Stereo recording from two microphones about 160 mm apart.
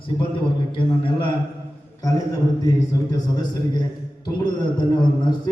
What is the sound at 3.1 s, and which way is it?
A man's voice, 25° left (ahead or behind).